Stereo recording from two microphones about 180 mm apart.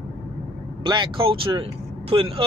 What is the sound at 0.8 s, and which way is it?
Speech, 25° right (ahead or behind).